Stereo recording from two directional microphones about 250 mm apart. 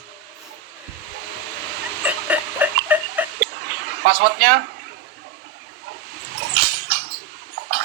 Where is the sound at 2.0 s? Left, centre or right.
Centre.